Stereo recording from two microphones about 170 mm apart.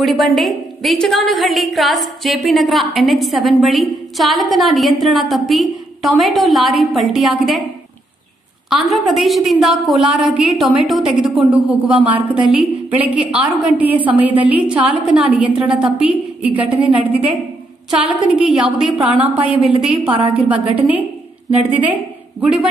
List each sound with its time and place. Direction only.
0.0 s a woman's voice: centre (ahead or behind)
8.6 s a woman's voice: centre (ahead or behind)
20.1 s a woman's voice: 30° right (ahead or behind)
20.3 s a woman's voice: 10° right (ahead or behind)